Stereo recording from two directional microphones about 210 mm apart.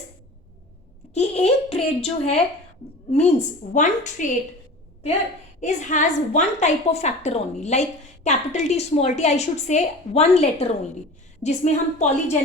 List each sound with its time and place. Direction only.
1.1 s a child's voice: 30° left (ahead or behind)
5.5 s a woman's voice: 35° left (ahead or behind)